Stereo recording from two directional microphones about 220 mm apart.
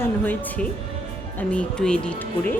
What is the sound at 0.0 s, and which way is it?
A woman's voice, 10° left (ahead or behind).